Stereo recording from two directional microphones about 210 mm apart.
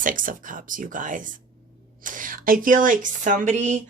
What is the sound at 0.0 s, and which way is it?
Speech, 40° right (ahead or behind).